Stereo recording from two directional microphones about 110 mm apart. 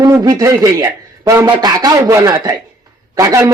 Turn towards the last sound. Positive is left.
turn(degrees=-30)  # may be behind; listen again after turning